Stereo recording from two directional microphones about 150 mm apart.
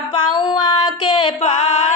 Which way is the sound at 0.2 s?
30° left (ahead or behind).